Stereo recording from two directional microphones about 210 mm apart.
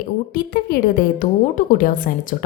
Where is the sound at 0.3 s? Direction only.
45° left (ahead or behind).